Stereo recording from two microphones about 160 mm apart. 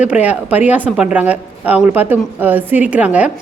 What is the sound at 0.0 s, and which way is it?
A woman's voice, 10° right (ahead or behind).